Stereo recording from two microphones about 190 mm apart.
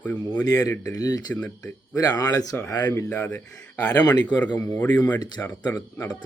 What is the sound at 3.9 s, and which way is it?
Speech, 20° left (ahead or behind).